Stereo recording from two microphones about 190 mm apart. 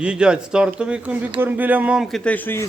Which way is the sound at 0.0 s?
5° right (ahead or behind).